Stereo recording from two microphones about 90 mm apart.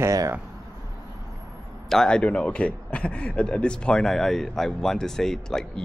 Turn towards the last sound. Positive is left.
turn(degrees=5)  # may be behind; listen again after turning